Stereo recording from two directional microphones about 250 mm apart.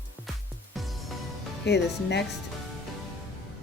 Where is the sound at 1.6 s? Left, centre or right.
Left.